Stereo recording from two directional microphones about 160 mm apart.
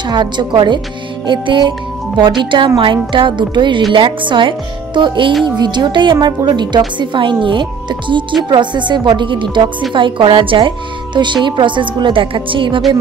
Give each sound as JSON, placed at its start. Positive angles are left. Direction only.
{"t": 0.1, "sound": "a woman's voice", "side_deg": -30}